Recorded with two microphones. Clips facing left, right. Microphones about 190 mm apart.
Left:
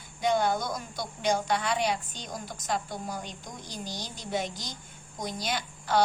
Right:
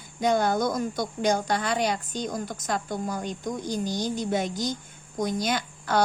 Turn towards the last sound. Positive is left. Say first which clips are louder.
# right 3 dB
turn(degrees=-50)  # may be behind; listen again after turning